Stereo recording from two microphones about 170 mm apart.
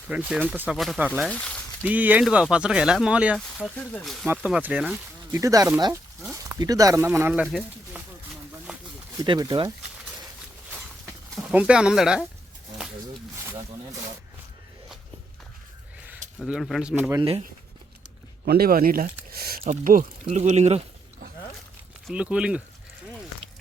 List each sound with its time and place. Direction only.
0.1 s speech: 5° right (ahead or behind)
1.3 s speech: 5° left (ahead or behind)
1.8 s speech: 10° right (ahead or behind)
7.4 s speech: centre (ahead or behind)
9.2 s speech: 25° right (ahead or behind)
11.5 s speech: 5° right (ahead or behind)
16.4 s speech: centre (ahead or behind)
18.4 s speech: 65° right (ahead or behind)
20.2 s speech: 45° right (ahead or behind)
22.0 s speech: 5° right (ahead or behind)